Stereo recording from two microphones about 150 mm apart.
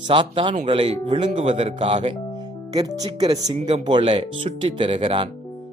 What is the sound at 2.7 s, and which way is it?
A man's voice, 25° right (ahead or behind).